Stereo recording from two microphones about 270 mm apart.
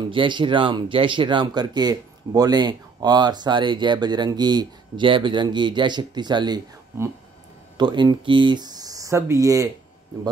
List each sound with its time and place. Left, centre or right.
0.0 s speech: centre